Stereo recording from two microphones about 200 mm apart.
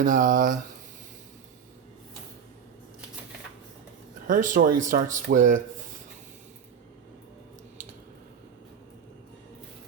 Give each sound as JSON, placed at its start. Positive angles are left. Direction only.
{"t": 0.0, "sound": "speech", "side_deg": -40}
{"t": 4.3, "sound": "speech", "side_deg": -40}